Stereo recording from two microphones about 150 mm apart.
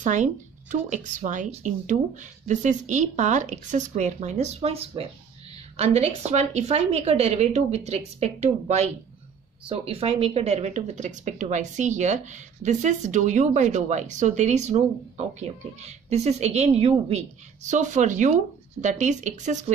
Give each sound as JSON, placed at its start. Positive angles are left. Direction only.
{"t": 0.0, "sound": "speech", "side_deg": -55}